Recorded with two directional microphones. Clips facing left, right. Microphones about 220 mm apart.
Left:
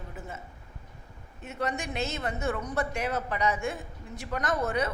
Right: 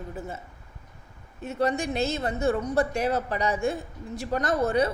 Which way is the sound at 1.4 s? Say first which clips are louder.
Right 7 dB; 30° right (ahead or behind).